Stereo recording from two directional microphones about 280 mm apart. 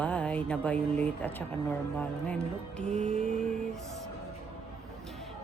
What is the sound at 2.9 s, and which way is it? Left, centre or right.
Music, right.